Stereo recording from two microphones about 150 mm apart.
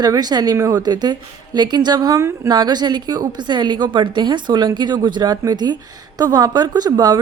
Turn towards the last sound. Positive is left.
turn(degrees=-25)  # may be behind; listen again after turning